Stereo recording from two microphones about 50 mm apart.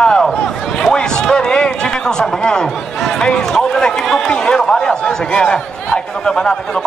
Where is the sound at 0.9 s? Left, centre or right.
Centre.